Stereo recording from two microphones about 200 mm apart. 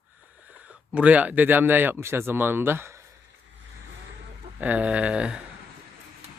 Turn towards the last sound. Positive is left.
turn(degrees=-5)  # may be behind; listen again after turning